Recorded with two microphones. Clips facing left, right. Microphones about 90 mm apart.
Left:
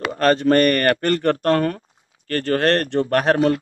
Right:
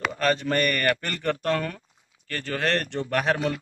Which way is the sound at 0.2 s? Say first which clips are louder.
Left 9 dB; 50° left (ahead or behind).